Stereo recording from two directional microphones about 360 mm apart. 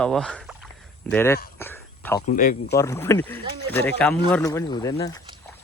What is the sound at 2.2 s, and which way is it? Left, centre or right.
Speech, left.